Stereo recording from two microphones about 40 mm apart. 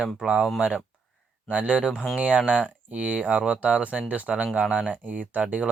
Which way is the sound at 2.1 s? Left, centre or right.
Right.